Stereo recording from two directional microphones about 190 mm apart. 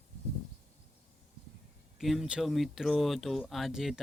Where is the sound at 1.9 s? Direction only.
Centre (ahead or behind).